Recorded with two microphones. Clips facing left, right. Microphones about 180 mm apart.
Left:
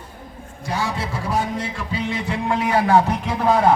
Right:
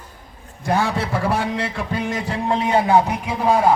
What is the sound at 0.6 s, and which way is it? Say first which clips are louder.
A man's voice: right 5 dB; 60° right (ahead or behind).